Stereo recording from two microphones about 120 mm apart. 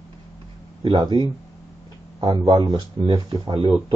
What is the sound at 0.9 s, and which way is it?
Speech, 35° right (ahead or behind).